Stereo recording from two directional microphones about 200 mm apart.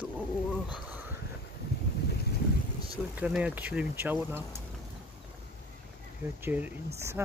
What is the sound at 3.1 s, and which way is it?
Speech, 5° right (ahead or behind).